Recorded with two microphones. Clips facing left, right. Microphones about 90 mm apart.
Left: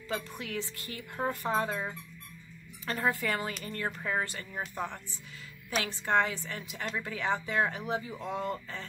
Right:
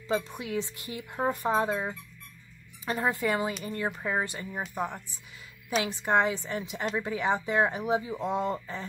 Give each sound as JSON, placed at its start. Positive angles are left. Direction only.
{"t": 0.1, "sound": "speech", "side_deg": -20}